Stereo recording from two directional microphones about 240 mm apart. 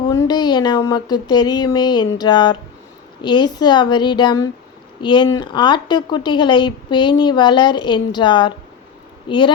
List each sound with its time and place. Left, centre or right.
0.0 s a woman's voice: centre